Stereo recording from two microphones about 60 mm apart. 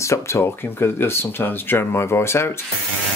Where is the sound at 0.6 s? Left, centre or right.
Left.